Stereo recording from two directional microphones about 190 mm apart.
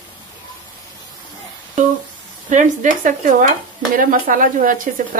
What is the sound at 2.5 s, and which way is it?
Speech, 40° right (ahead or behind).